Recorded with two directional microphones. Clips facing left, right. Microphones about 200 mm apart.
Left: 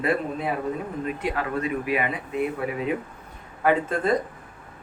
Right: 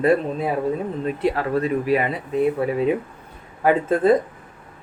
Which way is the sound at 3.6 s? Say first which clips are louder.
Right 5 dB; 35° right (ahead or behind).